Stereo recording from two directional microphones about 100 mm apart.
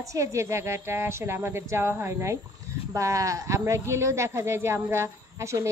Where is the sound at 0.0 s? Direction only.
30° right (ahead or behind).